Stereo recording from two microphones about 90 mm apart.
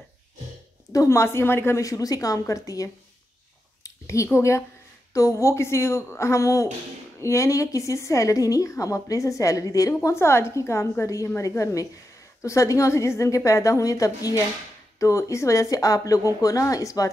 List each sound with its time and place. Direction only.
0.9 s a woman's voice: 30° left (ahead or behind)